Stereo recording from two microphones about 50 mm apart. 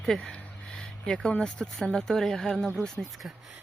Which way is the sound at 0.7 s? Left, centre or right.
Centre.